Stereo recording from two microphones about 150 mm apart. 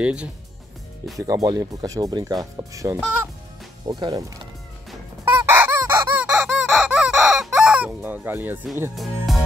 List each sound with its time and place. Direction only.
0.0 s speech: 5° right (ahead or behind)
1.2 s speech: 25° right (ahead or behind)
5.2 s squeak: 15° right (ahead or behind)
6.4 s fowl: centre (ahead or behind)
8.9 s speech: centre (ahead or behind)